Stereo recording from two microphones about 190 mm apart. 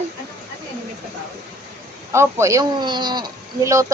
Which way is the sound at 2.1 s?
15° right (ahead or behind).